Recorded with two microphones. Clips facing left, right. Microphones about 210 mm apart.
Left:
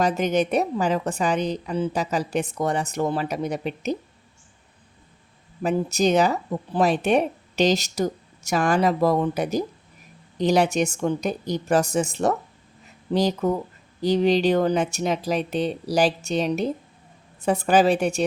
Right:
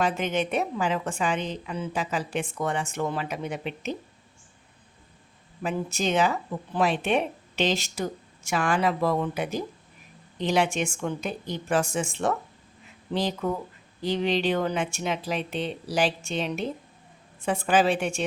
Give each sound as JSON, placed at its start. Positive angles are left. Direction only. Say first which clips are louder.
{"t": 0.0, "sound": "speech", "louder": "left 5 dB", "side_deg": 40}
{"t": 5.6, "sound": "speech", "louder": "left 6 dB", "side_deg": 40}